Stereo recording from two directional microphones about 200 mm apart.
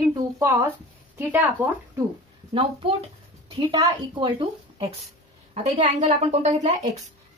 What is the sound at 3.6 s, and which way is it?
A woman's voice, 25° right (ahead or behind).